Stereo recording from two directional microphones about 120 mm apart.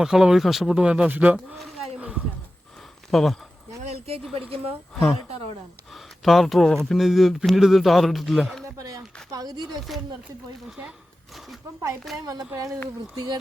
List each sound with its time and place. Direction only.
0.0 s speech: 5° right (ahead or behind)
2.0 s a sound: 10° right (ahead or behind)
3.1 s speech: centre (ahead or behind)
3.8 s a sound: 55° right (ahead or behind)
4.4 s speech: 50° right (ahead or behind)
5.9 s speech: centre (ahead or behind)
8.6 s a sound: 30° right (ahead or behind)
9.3 s speech: 30° right (ahead or behind)
10.7 s speech: 10° right (ahead or behind)
12.5 s speech: 25° right (ahead or behind)
13.1 s speech: 35° right (ahead or behind)